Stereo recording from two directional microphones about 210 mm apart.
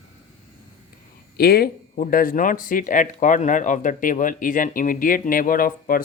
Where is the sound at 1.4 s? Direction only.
45° left (ahead or behind).